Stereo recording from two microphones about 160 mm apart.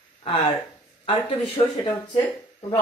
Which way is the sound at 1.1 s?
35° left (ahead or behind).